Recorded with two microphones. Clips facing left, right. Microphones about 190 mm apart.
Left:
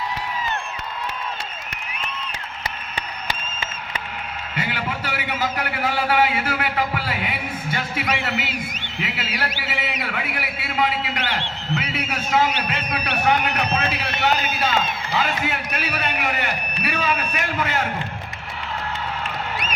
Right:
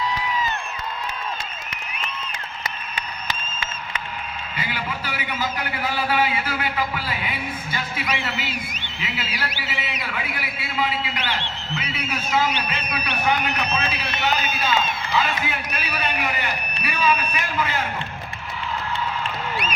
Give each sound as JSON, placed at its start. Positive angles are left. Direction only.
{"t": 4.5, "sound": "a man's voice", "side_deg": 70}